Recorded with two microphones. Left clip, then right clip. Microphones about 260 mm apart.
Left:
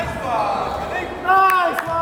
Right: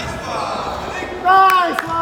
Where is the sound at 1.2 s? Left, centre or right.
Right.